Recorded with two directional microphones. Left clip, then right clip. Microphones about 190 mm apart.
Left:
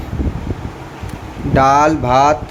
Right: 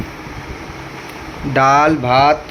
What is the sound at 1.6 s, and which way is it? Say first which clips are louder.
Speech: even; 5° left (ahead or behind).